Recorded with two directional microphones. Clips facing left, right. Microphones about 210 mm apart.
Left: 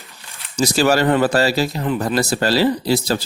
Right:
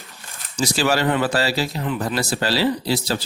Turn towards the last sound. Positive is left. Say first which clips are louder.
# left 4 dB
turn(degrees=45)  # may be behind; listen again after turning